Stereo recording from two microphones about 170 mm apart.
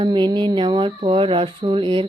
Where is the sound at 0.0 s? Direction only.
25° right (ahead or behind).